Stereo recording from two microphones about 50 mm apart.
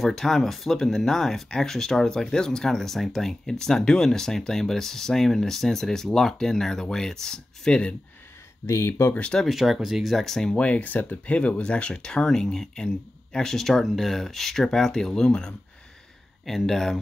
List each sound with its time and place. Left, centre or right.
0.0 s speech: centre
8.6 s speech: left
9.5 s speech: centre
10.5 s speech: left; by 17.0 s centre